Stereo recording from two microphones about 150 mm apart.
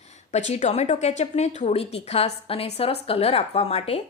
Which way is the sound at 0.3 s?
50° left (ahead or behind).